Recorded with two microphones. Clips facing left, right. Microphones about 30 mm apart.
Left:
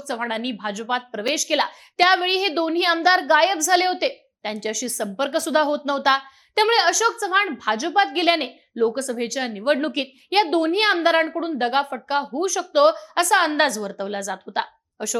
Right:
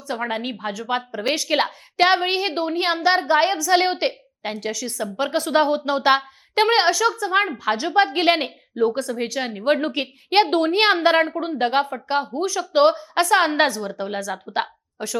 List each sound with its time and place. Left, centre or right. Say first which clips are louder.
0.1 s a woman's voice: even; centre
2.0 s a woman's voice: even; centre; by 6.6 s right
6.6 s a woman's voice: even; centre
7.7 s a woman's voice: right 1 dB; right; by 9.9 s centre
9.9 s a woman's voice: right 2 dB; right
13.3 s a woman's voice: right 1 dB; centre
13.7 s a woman's voice: even; right
14.5 s a sound: right 2 dB; centre